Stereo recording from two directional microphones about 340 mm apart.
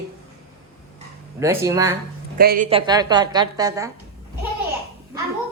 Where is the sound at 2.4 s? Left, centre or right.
Right.